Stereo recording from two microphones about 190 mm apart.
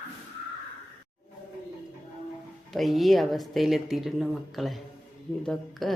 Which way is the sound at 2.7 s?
Centre (ahead or behind).